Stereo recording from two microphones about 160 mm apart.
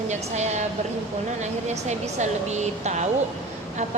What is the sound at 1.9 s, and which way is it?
A woman's voice, 45° right (ahead or behind).